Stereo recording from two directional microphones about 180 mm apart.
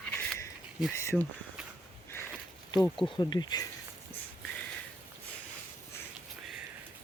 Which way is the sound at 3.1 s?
25° left (ahead or behind).